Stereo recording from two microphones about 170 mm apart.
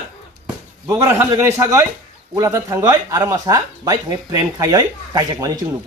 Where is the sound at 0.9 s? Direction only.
15° right (ahead or behind).